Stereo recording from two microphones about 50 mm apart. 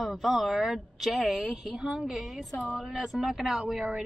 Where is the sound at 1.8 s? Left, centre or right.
Centre.